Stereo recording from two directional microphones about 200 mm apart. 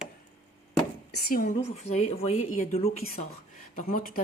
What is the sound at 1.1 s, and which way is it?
Speech, 45° left (ahead or behind).